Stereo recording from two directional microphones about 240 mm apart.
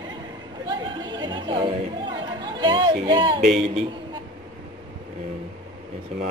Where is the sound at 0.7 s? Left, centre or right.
Centre.